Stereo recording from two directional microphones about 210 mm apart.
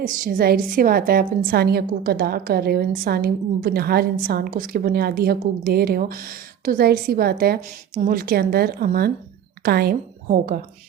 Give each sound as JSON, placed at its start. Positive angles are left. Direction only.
{"t": 0.0, "sound": "a woman's voice", "side_deg": -40}